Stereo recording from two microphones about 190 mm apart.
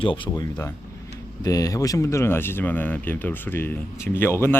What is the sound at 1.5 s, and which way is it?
Speech, 20° left (ahead or behind).